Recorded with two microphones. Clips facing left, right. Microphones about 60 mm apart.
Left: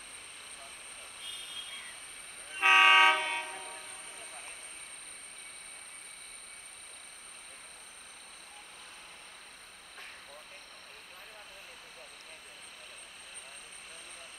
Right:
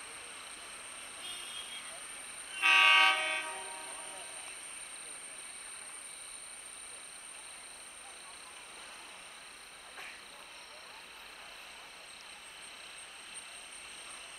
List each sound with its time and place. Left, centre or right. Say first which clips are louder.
2.5 s train: left 4 dB; centre
3.2 s train: left 1 dB; centre